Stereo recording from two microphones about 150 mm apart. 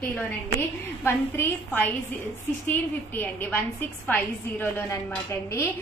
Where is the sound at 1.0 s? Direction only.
15° left (ahead or behind).